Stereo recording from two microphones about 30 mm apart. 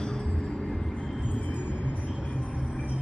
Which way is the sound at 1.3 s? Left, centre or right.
Left.